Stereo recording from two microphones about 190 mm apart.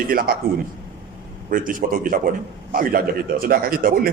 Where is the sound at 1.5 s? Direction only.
45° right (ahead or behind).